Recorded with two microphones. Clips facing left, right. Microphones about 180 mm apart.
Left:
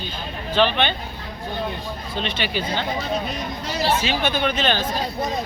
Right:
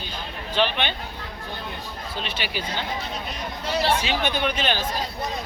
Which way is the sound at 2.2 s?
10° right (ahead or behind).